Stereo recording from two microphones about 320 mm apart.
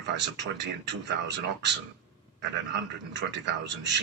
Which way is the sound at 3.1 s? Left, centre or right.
Right.